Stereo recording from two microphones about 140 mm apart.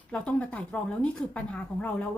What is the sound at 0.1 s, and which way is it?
A woman's voice, 10° left (ahead or behind).